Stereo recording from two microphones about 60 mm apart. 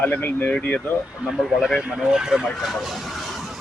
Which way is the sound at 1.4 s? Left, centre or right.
Centre.